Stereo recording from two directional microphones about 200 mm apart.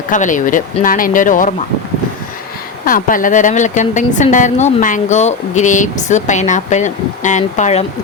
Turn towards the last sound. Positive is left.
turn(degrees=35)  # may be behind; listen again after turning